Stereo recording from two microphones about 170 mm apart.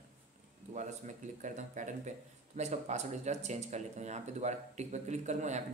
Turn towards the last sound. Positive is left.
turn(degrees=-45)  # may be behind; listen again after turning